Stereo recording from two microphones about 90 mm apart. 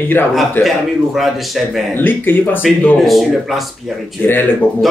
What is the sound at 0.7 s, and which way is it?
A man's voice, centre (ahead or behind).